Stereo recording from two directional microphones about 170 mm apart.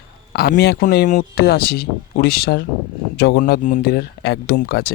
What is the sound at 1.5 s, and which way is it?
Speech, 65° left (ahead or behind).